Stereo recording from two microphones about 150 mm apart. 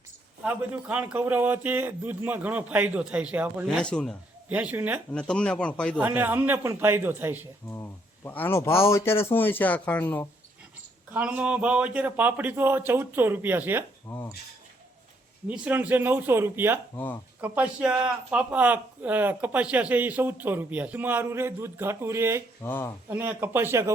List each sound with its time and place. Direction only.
0.4 s speech: 10° right (ahead or behind)
3.7 s speech: 5° left (ahead or behind)
4.4 s speech: 10° right (ahead or behind)
5.1 s speech: 5° left (ahead or behind)
6.0 s speech: 10° right (ahead or behind)
7.7 s speech: 15° left (ahead or behind)
11.1 s speech: 10° right (ahead or behind)
14.1 s speech: 20° left (ahead or behind)
15.4 s speech: 10° right (ahead or behind)
22.6 s speech: 15° left (ahead or behind)
23.0 s speech: 15° right (ahead or behind)